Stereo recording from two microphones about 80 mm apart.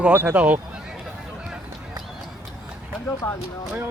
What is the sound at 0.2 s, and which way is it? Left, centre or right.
Speech, centre.